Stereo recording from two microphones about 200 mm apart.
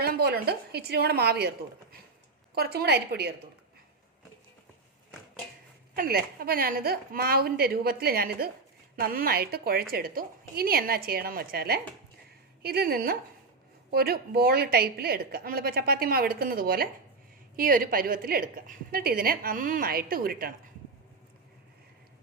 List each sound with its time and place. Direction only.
0.0 s a woman's voice: 50° right (ahead or behind)
6.0 s a woman's voice: 50° right (ahead or behind)